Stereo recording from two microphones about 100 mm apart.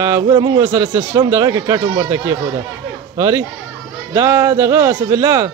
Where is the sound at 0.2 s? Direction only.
40° right (ahead or behind).